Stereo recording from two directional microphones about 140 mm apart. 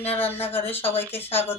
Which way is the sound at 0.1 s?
15° left (ahead or behind).